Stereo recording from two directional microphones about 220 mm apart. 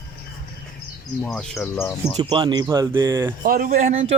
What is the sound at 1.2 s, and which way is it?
Speech, centre (ahead or behind).